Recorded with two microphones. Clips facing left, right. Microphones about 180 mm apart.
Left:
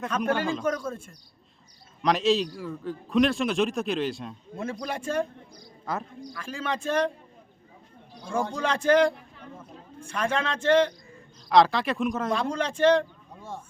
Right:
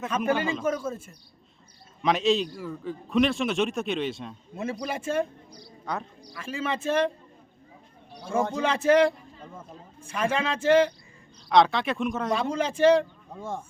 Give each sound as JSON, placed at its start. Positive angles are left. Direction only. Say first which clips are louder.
{"t": 0.0, "sound": "a man's voice", "louder": "right 1 dB", "side_deg": 0}
{"t": 8.5, "sound": "a man's voice", "louder": "right 1 dB", "side_deg": -5}
{"t": 13.3, "sound": "speech", "louder": "right 6 dB", "side_deg": -45}